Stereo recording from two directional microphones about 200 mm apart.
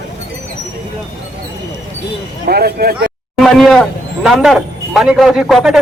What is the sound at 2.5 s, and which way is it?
Speech, 50° right (ahead or behind).